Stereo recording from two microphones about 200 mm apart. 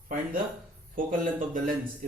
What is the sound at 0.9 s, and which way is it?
Speech, 45° right (ahead or behind).